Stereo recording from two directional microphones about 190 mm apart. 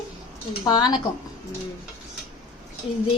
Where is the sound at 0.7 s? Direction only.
20° left (ahead or behind).